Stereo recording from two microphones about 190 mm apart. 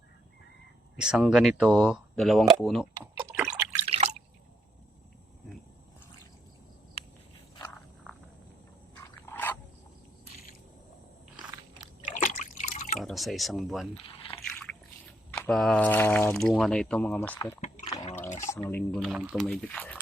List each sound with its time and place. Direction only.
0.9 s speech: 5° right (ahead or behind)
3.0 s a sound: 10° right (ahead or behind)
3.8 s drip: 35° right (ahead or behind)
9.0 s a sound: 10° left (ahead or behind)
12.1 s liquid: 40° left (ahead or behind)
13.0 s speech: centre (ahead or behind)
13.9 s a sound: 30° left (ahead or behind)
14.4 s drip: centre (ahead or behind)
15.4 s speech: centre (ahead or behind)
17.8 s liquid: 20° left (ahead or behind)
18.7 s speech: 5° left (ahead or behind)